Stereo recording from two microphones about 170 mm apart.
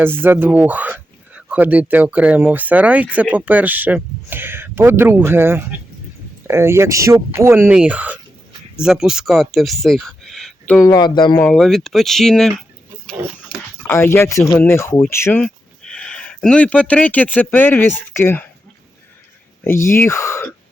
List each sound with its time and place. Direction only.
0.0 s speech: 10° right (ahead or behind); by 10.8 s 5° left (ahead or behind)
10.8 s speech: 20° left (ahead or behind)
11.3 s speech: 5° left (ahead or behind)
13.5 s dog: 30° left (ahead or behind)
13.8 s speech: 15° left (ahead or behind)
19.6 s speech: 15° left (ahead or behind)